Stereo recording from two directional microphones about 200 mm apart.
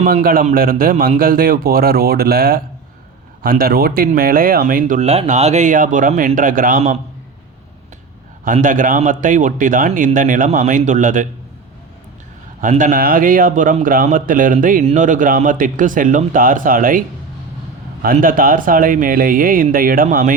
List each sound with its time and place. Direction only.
0.0 s a man's voice: 45° right (ahead or behind)
8.4 s a man's voice: 40° right (ahead or behind)
12.6 s a man's voice: 40° right (ahead or behind)
18.0 s a man's voice: 45° right (ahead or behind)